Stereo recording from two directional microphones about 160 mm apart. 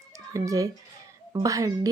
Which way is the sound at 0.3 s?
20° right (ahead or behind).